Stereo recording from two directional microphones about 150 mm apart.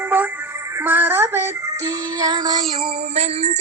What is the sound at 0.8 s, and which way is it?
Synthetic singing, 15° right (ahead or behind).